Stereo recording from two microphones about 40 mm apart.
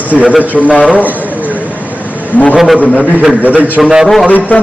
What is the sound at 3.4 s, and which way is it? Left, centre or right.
Speech, right.